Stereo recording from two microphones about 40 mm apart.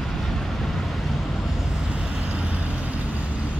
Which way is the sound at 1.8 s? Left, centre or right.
Centre.